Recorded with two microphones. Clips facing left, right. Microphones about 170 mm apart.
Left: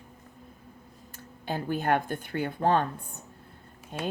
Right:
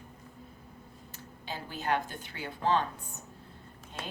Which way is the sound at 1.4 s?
55° left (ahead or behind).